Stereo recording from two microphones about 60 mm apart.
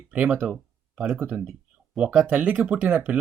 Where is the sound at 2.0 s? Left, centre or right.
Centre.